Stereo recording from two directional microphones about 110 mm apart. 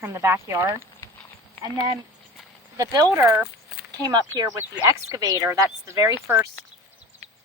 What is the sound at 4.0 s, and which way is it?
Speech, 35° right (ahead or behind).